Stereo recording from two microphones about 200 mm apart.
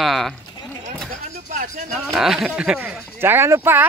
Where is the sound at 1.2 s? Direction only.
40° right (ahead or behind).